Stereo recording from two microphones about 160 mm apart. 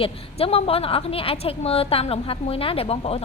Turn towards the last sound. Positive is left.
turn(degrees=40)  # may be behind; listen again after turning